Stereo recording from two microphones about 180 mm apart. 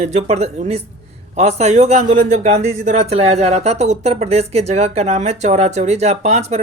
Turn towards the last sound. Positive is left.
turn(degrees=-35)  # may be behind; listen again after turning